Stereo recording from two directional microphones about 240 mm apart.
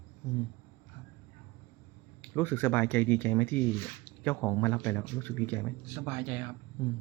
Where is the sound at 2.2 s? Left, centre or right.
Centre.